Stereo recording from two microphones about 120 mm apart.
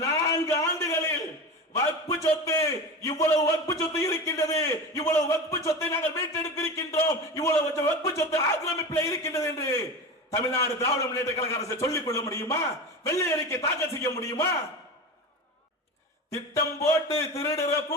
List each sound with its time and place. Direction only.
0.0 s a sound: 25° left (ahead or behind)
2.2 s a man's voice: 25° left (ahead or behind)
16.3 s a man's voice: 25° left (ahead or behind)